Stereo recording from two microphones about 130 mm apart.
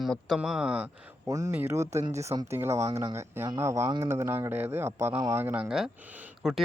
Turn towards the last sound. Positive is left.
turn(degrees=-10)  # may be behind; listen again after turning